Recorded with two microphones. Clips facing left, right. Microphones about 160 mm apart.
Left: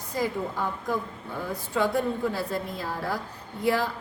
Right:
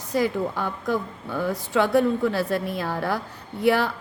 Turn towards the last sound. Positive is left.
turn(degrees=-70)  # may be behind; listen again after turning